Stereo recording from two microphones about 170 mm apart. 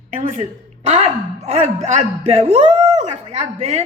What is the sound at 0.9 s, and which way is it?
Speech, 40° right (ahead or behind).